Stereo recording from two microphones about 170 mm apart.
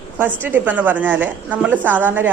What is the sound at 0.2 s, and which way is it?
A woman's voice, 10° right (ahead or behind).